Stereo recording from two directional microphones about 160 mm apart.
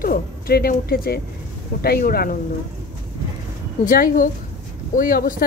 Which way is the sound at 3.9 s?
60° left (ahead or behind).